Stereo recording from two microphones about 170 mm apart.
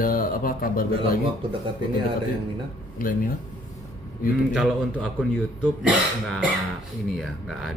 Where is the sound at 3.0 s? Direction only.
55° left (ahead or behind).